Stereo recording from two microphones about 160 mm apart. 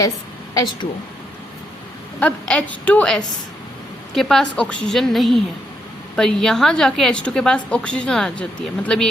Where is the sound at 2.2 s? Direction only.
5° left (ahead or behind).